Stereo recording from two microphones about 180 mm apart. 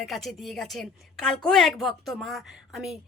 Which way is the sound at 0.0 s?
Centre (ahead or behind).